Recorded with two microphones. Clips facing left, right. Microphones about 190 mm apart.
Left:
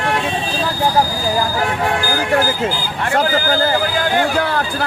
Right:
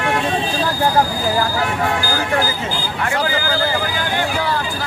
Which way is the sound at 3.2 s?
50° left (ahead or behind).